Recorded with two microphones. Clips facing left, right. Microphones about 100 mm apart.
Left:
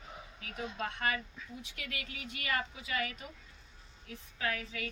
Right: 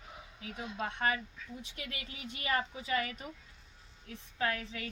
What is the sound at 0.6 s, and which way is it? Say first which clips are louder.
Speech: even; 5° right (ahead or behind).